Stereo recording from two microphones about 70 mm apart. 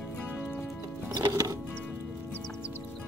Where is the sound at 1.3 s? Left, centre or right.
Right.